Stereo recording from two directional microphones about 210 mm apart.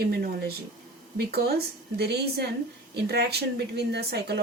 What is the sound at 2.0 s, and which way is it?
A woman's voice, 50° right (ahead or behind).